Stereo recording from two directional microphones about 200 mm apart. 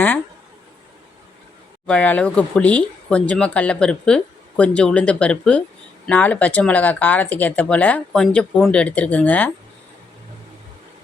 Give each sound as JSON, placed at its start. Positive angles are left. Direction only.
{"t": 1.9, "sound": "speech", "side_deg": 5}